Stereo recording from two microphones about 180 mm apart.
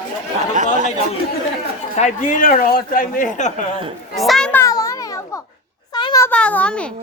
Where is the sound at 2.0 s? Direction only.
45° left (ahead or behind).